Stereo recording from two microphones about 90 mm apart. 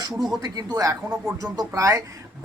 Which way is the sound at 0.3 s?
45° right (ahead or behind).